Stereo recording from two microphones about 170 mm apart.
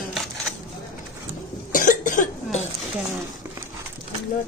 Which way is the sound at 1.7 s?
50° left (ahead or behind).